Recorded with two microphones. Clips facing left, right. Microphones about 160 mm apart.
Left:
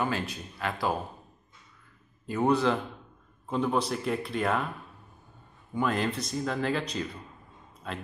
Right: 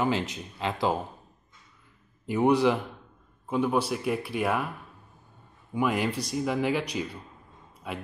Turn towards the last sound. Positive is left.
turn(degrees=-10)  # may be behind; listen again after turning